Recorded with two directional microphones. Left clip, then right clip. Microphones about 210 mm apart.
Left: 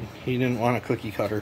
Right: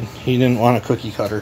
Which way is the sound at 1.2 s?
30° left (ahead or behind).